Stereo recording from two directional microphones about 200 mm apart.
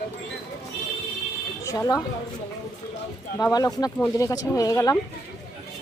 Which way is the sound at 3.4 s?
20° left (ahead or behind).